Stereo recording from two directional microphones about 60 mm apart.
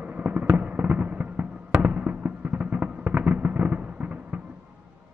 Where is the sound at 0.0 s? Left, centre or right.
Right.